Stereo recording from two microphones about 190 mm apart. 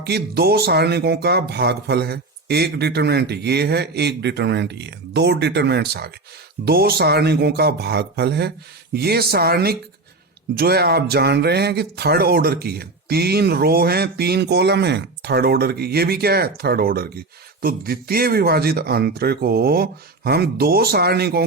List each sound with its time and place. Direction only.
0.0 s speech: 55° right (ahead or behind)